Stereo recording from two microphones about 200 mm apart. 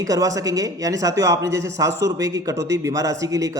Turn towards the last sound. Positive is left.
turn(degrees=-15)  # may be behind; listen again after turning